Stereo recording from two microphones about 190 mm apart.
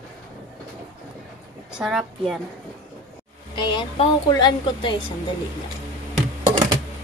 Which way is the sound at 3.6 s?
25° left (ahead or behind).